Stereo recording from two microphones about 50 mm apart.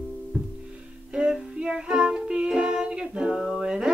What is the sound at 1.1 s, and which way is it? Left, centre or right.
Music, centre.